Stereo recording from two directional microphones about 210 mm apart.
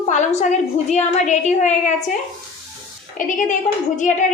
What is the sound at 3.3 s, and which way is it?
A woman's voice, 35° left (ahead or behind).